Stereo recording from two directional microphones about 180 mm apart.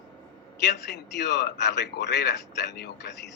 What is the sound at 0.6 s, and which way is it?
A man's voice, 70° left (ahead or behind).